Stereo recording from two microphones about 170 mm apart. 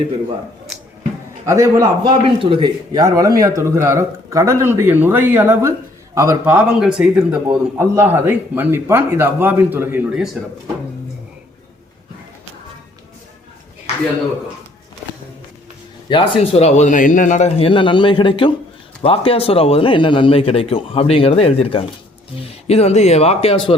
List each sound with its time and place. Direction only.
1.5 s speech: 20° right (ahead or behind)
2.2 s speech: 30° right (ahead or behind); by 10.2 s 10° right (ahead or behind)
16.0 s a man's voice: 30° left (ahead or behind)